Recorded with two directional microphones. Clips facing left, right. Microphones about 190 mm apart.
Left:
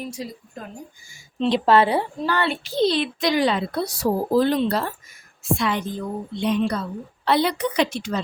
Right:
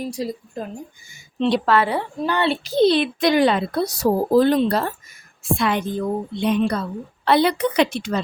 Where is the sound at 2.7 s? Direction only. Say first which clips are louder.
Right 4 dB; 60° right (ahead or behind).